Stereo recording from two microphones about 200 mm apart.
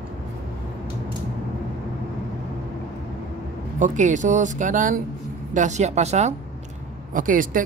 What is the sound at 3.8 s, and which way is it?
Speech, 40° right (ahead or behind).